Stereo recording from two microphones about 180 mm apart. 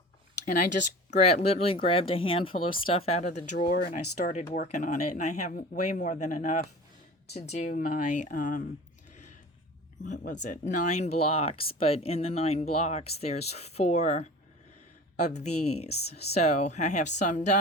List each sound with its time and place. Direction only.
1.1 s speech: 35° left (ahead or behind)
10.0 s speech: 45° left (ahead or behind)
15.4 s speech: 35° left (ahead or behind)